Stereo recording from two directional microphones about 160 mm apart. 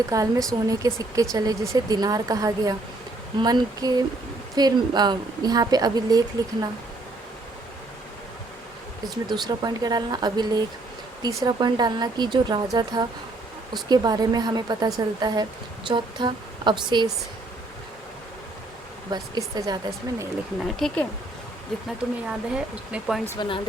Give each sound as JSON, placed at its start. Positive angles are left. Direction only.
{"t": 0.1, "sound": "speech", "side_deg": -20}
{"t": 9.0, "sound": "speech", "side_deg": -25}
{"t": 19.1, "sound": "speech", "side_deg": -25}
{"t": 20.7, "sound": "speech", "side_deg": 5}
{"t": 21.8, "sound": "speech", "side_deg": -5}